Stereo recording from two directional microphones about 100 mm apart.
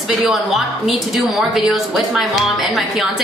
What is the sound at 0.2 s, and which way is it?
A woman's voice, centre (ahead or behind).